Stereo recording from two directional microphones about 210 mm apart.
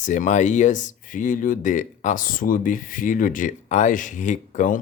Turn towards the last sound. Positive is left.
turn(degrees=35)  # may be behind; listen again after turning